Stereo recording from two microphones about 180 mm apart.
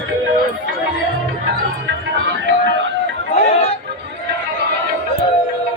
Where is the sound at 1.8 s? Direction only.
85° right.